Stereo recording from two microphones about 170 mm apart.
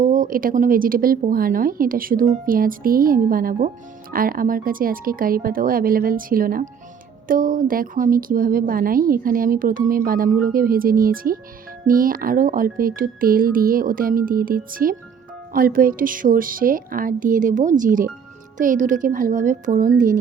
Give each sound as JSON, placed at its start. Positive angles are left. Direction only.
{"t": 0.0, "sound": "a woman's voice", "side_deg": -55}